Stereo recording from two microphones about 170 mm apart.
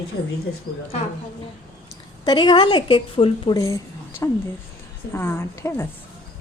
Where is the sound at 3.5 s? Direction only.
20° left (ahead or behind).